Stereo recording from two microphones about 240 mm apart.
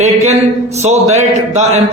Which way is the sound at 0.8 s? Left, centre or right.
Right.